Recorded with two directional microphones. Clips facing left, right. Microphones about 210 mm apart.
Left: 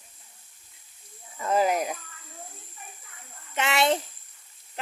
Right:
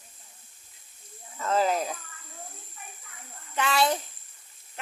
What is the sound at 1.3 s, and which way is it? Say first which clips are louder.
Speech: left 1 dB; 15° left (ahead or behind).